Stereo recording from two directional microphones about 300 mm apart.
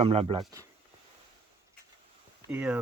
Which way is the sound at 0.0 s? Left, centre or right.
Centre.